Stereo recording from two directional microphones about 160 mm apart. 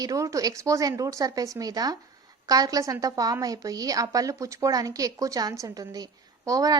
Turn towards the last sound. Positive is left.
turn(degrees=-20)  # may be behind; listen again after turning